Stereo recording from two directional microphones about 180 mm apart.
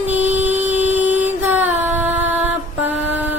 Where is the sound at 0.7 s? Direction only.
40° right (ahead or behind).